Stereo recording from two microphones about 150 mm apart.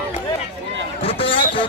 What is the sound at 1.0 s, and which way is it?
Speech, 40° left (ahead or behind).